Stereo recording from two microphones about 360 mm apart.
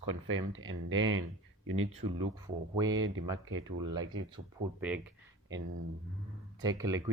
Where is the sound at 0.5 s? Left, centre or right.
Right.